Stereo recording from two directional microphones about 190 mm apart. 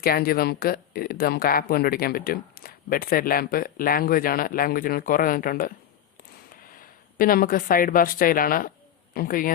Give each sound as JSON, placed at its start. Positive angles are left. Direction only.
{"t": 0.0, "sound": "speech", "side_deg": 50}